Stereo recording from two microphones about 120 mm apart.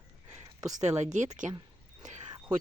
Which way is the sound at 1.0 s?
80° right.